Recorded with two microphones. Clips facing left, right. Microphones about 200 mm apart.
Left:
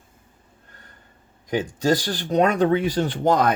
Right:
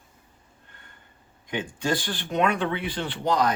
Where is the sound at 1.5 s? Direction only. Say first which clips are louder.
Left 6 dB; 40° left (ahead or behind).